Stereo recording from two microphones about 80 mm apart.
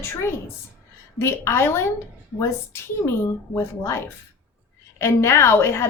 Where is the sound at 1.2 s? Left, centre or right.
Left.